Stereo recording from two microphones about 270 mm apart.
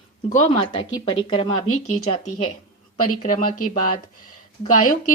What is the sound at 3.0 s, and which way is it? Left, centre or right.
Speech, left.